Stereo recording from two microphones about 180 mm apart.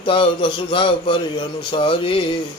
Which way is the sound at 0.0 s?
30° left (ahead or behind).